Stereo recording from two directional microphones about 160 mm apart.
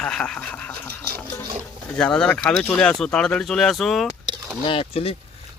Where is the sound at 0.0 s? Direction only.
5° left (ahead or behind).